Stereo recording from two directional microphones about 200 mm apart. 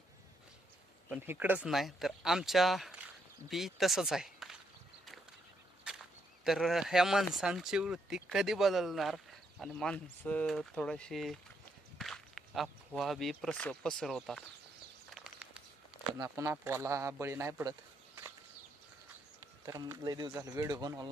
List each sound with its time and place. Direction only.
1.1 s speech: 10° right (ahead or behind)
5.9 s walk: 5° right (ahead or behind)
6.4 s speech: centre (ahead or behind)
15.1 s crumpling: 5° right (ahead or behind)
16.2 s speech: 15° right (ahead or behind)
19.6 s speech: 15° right (ahead or behind)